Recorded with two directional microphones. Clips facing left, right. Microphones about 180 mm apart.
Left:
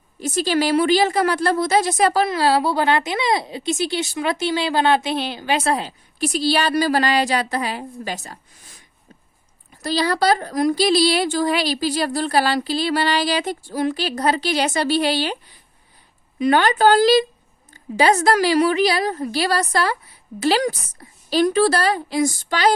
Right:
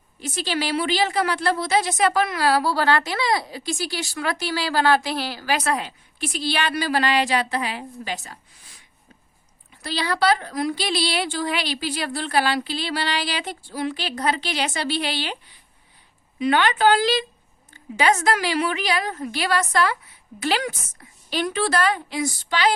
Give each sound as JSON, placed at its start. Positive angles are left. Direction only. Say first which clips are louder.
{"t": 0.2, "sound": "a woman's voice", "louder": "left 7 dB", "side_deg": 45}
{"t": 9.8, "sound": "a woman's voice", "louder": "left 3 dB", "side_deg": 40}
{"t": 16.4, "sound": "a woman's voice", "louder": "left 3 dB", "side_deg": 40}